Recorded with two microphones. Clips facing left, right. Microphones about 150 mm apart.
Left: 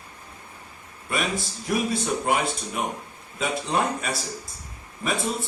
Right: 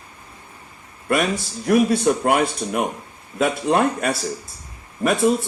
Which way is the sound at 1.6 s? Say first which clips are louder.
Right 10 dB; 50° right (ahead or behind).